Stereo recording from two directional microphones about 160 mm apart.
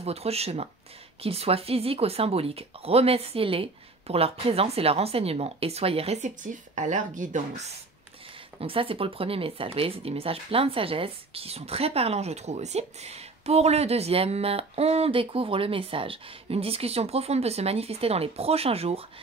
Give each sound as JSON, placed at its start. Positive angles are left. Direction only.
{"t": 0.0, "sound": "speech", "side_deg": -40}
{"t": 8.5, "sound": "speech", "side_deg": -35}